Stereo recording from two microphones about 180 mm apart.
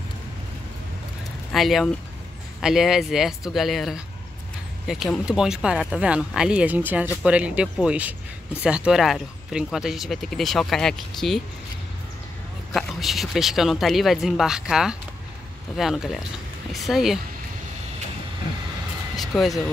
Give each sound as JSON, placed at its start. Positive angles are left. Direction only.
{"t": 1.5, "sound": "speech", "side_deg": 0}
{"t": 12.7, "sound": "speech", "side_deg": 0}
{"t": 19.1, "sound": "vehicle", "side_deg": 0}